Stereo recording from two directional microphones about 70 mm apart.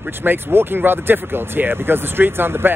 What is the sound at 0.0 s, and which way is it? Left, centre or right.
Speech, right.